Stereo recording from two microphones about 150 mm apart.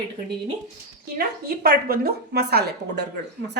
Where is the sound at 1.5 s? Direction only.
85° right.